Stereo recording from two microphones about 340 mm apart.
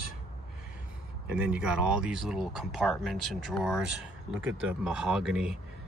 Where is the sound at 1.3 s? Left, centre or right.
Centre.